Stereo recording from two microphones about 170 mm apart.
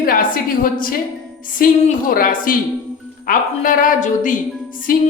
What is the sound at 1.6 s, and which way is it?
A woman's voice, 55° left (ahead or behind).